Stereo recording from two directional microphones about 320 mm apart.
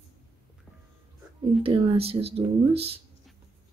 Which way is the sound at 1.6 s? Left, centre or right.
Centre.